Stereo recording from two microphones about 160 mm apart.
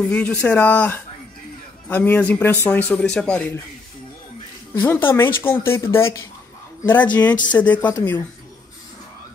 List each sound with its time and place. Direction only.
0.1 s speech: 5° left (ahead or behind)
4.7 s speech: 15° left (ahead or behind)